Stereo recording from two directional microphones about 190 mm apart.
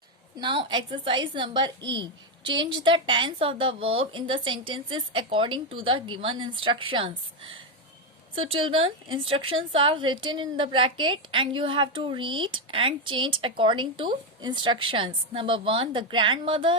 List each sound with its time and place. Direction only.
0.3 s a woman's voice: 25° right (ahead or behind)